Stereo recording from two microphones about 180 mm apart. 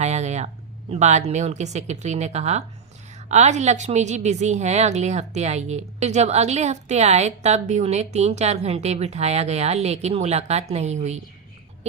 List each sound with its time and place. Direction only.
0.0 s a woman's voice: 40° right (ahead or behind)